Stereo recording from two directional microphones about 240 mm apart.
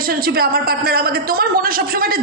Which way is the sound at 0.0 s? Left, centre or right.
Right.